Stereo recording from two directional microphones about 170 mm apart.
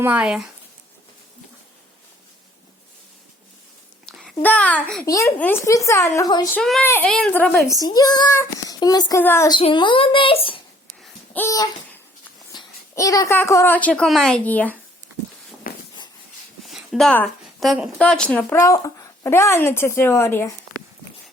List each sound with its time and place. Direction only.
0.0 s speech: 5° right (ahead or behind)
4.0 s a sound: centre (ahead or behind)
4.4 s a child's voice: 10° left (ahead or behind)
5.0 s a child's voice: 20° left (ahead or behind)
6.5 s a child's voice: 5° left (ahead or behind)
7.8 s a child's voice: 20° left (ahead or behind)
9.5 s speech: 30° left (ahead or behind)
11.3 s a child's voice: 20° left (ahead or behind)
15.6 s a sound: 60° left (ahead or behind)
16.6 s a woman's voice: centre (ahead or behind); by 20.5 s 15° left (ahead or behind)